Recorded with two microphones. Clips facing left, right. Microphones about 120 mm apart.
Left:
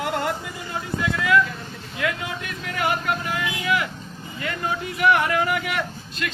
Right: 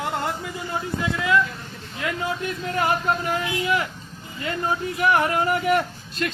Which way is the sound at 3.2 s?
30° right (ahead or behind).